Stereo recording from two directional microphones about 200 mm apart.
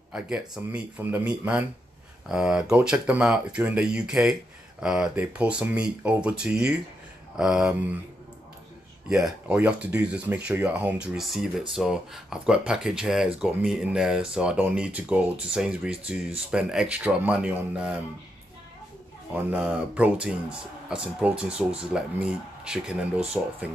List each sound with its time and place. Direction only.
0.1 s a man's voice: 5° right (ahead or behind)
9.1 s speech: 5° right (ahead or behind)
19.3 s speech: 5° right (ahead or behind)